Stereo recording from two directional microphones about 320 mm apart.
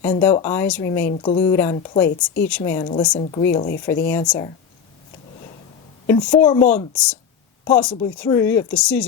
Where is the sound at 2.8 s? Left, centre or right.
Centre.